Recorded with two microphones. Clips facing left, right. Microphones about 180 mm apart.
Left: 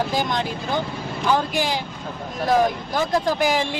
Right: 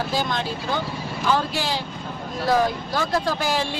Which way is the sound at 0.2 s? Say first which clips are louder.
Left 2 dB; 15° left (ahead or behind).